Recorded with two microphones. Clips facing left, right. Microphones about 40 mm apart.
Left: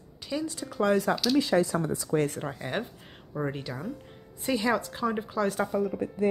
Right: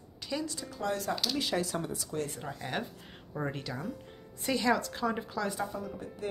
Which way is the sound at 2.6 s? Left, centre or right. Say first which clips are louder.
Left 3 dB; centre.